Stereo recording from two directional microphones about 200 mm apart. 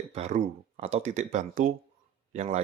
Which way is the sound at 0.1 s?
35° right (ahead or behind).